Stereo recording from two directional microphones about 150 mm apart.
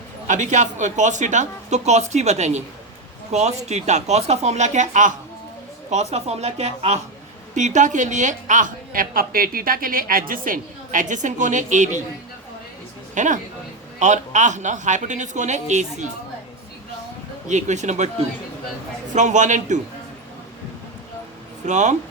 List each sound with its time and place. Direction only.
0.3 s a woman's voice: 55° right (ahead or behind)
13.1 s a woman's voice: 55° right (ahead or behind)
17.5 s speech: 55° right (ahead or behind)
19.1 s speech: 55° right (ahead or behind)
21.7 s speech: 50° right (ahead or behind)